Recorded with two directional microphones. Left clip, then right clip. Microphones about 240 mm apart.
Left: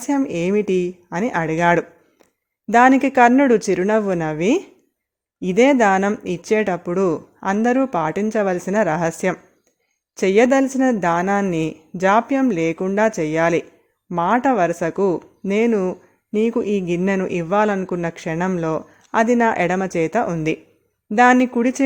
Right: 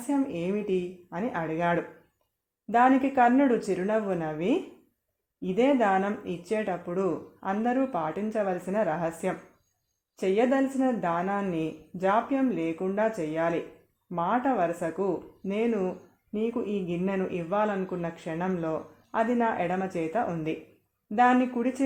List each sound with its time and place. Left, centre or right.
0.1 s speech: left